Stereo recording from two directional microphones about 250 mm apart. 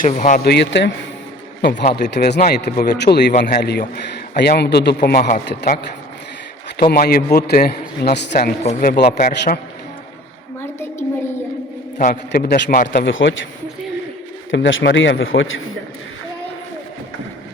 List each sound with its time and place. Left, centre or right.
0.0 s a man's voice: left
6.9 s a man's voice: left
10.6 s a sound: centre
11.9 s a man's voice: left
13.1 s a man's voice: left
14.5 s a man's voice: left